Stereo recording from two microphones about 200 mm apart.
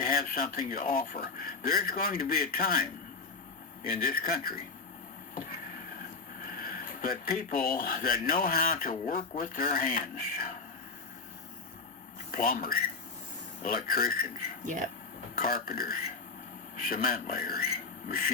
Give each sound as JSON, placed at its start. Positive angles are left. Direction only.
{"t": 0.0, "sound": "speech", "side_deg": 45}
{"t": 3.8, "sound": "speech", "side_deg": 45}
{"t": 5.3, "sound": "a sound", "side_deg": 45}
{"t": 6.6, "sound": "speech", "side_deg": 45}
{"t": 12.3, "sound": "speech", "side_deg": 45}
{"t": 14.6, "sound": "speech", "side_deg": -40}
{"t": 15.4, "sound": "speech", "side_deg": 45}